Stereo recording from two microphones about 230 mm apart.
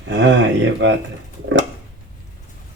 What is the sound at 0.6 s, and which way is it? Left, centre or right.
Speech, right.